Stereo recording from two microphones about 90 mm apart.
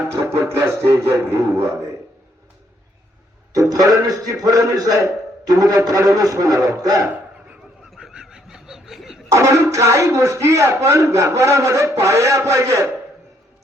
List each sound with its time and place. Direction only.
0.1 s a man's voice: 25° right (ahead or behind)
3.5 s a man's voice: 40° right (ahead or behind)
7.9 s a sound: 5° right (ahead or behind)
9.3 s speech: 35° right (ahead or behind)